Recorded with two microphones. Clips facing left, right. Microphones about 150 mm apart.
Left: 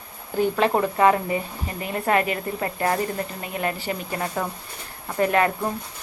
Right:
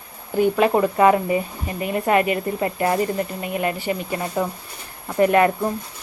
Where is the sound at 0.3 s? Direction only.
10° right (ahead or behind).